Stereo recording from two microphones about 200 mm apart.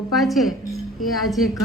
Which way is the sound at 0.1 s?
Centre (ahead or behind).